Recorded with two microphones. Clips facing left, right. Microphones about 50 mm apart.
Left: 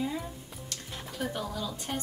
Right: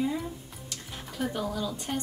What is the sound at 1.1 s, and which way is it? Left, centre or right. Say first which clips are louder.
Speech: right 3 dB; centre.